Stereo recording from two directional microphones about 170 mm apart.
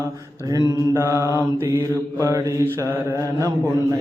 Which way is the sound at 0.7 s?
15° right (ahead or behind).